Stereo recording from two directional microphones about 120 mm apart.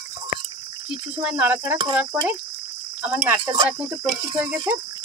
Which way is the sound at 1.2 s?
10° right (ahead or behind).